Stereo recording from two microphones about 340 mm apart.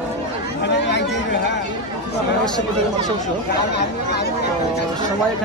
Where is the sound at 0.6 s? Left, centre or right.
Left.